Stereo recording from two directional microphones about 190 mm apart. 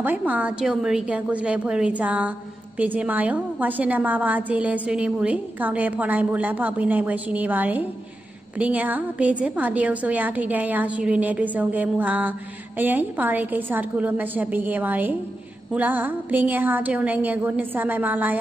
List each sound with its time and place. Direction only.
0.0 s a woman's voice: 10° right (ahead or behind)